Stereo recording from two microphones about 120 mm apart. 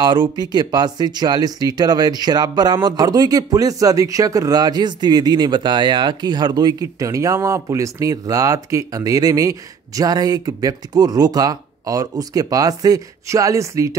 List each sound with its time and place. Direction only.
0.0 s speech: 40° right (ahead or behind)